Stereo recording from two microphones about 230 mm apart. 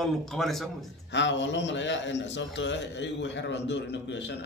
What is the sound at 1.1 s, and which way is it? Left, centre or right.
A man's voice, left.